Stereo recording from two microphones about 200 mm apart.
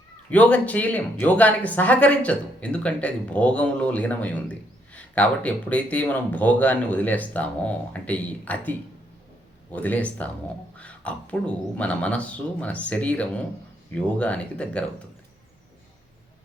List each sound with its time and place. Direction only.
0.3 s speech: 5° left (ahead or behind)
9.7 s speech: 5° left (ahead or behind)